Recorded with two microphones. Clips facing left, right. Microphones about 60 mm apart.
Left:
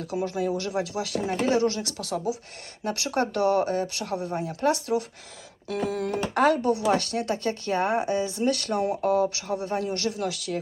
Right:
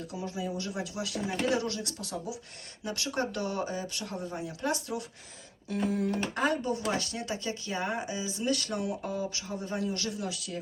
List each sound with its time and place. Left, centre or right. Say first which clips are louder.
0.0 s speech: left 8 dB; left
2.8 s speech: left 6 dB; left
4.7 s speech: left 8 dB; left
5.6 s speech: left 2 dB; left
8.8 s speech: left 8 dB; left
9.0 s speech: left 11 dB; left